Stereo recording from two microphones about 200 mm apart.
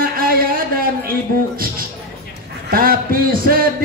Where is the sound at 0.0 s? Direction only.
45° right (ahead or behind).